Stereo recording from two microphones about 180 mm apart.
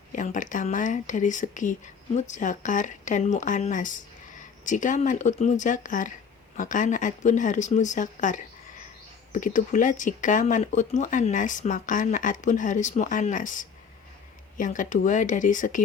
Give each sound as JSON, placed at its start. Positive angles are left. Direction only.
{"t": 0.1, "sound": "speech", "side_deg": 45}